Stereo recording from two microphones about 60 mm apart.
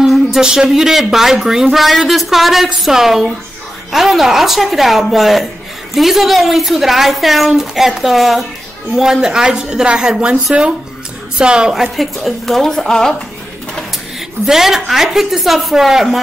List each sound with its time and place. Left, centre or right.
0.0 s a woman's voice: centre
11.7 s speech: centre
14.4 s speech: centre